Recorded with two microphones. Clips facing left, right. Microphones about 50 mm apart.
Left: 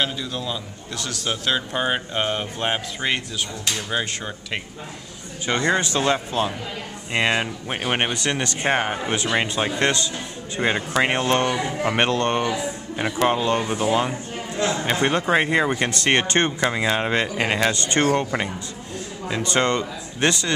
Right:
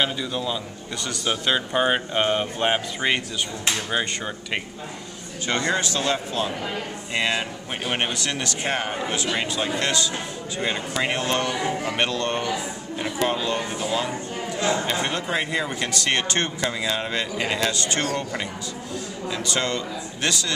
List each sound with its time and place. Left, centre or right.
0.0 s speech: centre
5.5 s a man's voice: centre